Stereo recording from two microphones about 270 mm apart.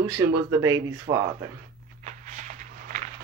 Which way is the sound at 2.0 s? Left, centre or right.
Right.